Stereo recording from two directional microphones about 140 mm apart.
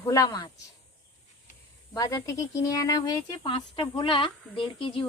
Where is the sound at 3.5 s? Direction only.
40° left (ahead or behind).